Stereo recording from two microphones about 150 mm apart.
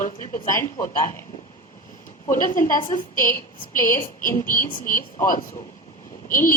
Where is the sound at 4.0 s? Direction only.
65° left (ahead or behind).